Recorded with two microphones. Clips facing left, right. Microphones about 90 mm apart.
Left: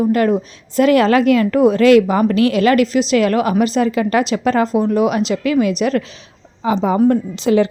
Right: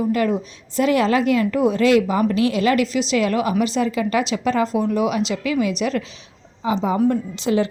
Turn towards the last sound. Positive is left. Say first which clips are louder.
# left 5 dB
turn(degrees=65)  # may be behind; listen again after turning